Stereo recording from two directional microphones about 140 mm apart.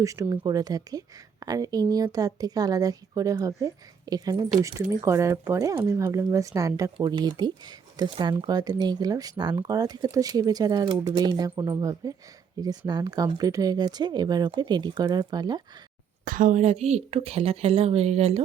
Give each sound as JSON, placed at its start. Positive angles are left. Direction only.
{"t": 0.0, "sound": "a woman's voice", "side_deg": -25}
{"t": 6.9, "sound": "a woman's voice", "side_deg": -35}
{"t": 16.2, "sound": "a woman's voice", "side_deg": -75}